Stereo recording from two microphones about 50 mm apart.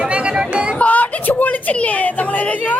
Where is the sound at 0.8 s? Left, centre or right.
Left.